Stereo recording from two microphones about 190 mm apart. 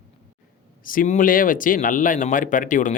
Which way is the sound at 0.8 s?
45° left (ahead or behind).